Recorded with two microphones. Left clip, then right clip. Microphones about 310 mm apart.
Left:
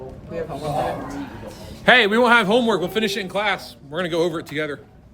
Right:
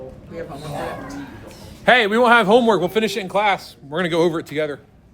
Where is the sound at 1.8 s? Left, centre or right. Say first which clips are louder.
Even; centre.